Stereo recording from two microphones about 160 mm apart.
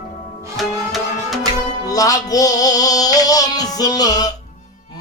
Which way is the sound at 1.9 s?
20° left (ahead or behind).